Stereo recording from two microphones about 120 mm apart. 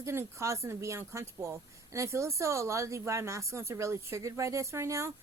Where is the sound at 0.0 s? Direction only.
25° right (ahead or behind).